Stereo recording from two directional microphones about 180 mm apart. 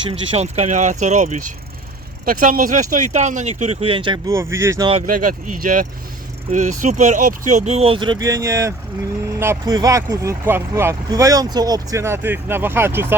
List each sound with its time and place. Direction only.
0.1 s speech: 35° right (ahead or behind)
4.3 s speech: 15° right (ahead or behind)
5.0 s speech: 50° right (ahead or behind); by 13.1 s 15° right (ahead or behind)